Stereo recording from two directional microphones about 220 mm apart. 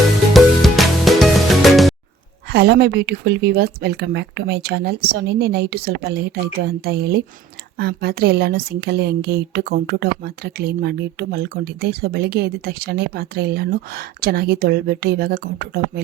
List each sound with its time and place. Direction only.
0.3 s music: centre (ahead or behind)
2.5 s a woman's voice: 45° right (ahead or behind)